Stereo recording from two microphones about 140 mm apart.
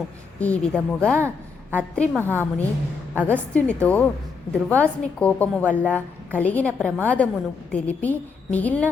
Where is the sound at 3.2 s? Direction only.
10° left (ahead or behind).